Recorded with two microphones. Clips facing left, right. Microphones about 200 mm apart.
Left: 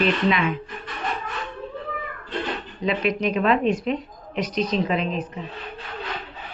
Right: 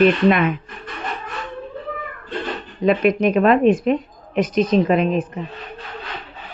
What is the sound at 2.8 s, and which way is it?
Speech, 50° right (ahead or behind).